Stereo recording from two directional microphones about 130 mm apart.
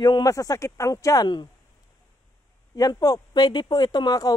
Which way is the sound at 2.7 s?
30° left (ahead or behind).